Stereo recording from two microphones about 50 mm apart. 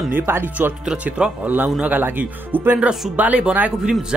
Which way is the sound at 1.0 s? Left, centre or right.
Right.